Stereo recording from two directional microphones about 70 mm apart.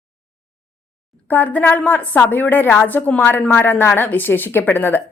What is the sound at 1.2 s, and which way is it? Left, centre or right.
A woman's voice, left.